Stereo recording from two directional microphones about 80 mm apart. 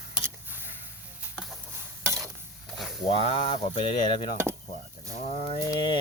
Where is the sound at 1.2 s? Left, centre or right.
Centre.